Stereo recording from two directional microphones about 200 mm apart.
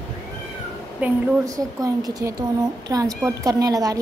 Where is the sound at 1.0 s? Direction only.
15° right (ahead or behind).